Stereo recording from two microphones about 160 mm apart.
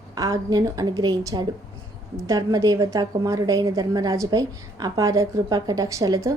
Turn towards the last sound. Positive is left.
turn(degrees=-20)  # may be behind; listen again after turning